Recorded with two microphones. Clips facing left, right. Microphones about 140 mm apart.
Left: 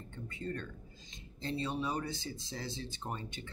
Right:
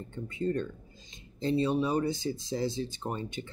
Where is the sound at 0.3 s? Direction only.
20° right (ahead or behind).